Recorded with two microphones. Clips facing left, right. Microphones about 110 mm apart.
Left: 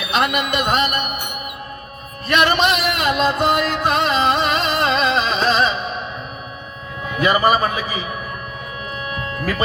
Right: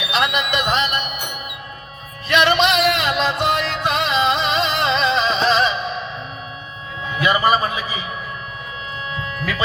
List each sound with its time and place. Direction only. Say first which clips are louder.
0.0 s speech: left 1 dB; 45° left (ahead or behind)
2.2 s music: even; 45° left (ahead or behind)
7.2 s speech: left 1 dB; 40° left (ahead or behind)
9.4 s music: left 2 dB; 45° left (ahead or behind)